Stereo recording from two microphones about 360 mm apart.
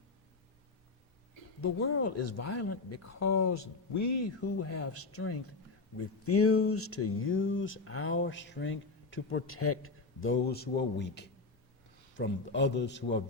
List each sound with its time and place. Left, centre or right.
1.6 s a man's voice: left